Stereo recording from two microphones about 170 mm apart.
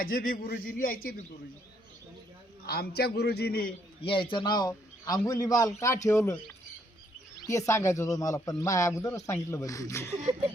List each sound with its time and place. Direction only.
0.0 s a man's voice: 55° left (ahead or behind)
2.6 s a man's voice: 65° left (ahead or behind)
4.0 s a man's voice: 30° left (ahead or behind)
7.4 s speech: 15° left (ahead or behind)